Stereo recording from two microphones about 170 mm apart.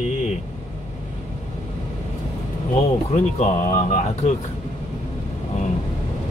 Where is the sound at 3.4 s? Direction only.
50° left (ahead or behind).